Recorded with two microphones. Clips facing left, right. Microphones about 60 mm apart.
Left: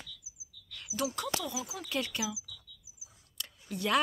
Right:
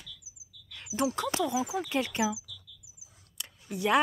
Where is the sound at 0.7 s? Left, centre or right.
Right.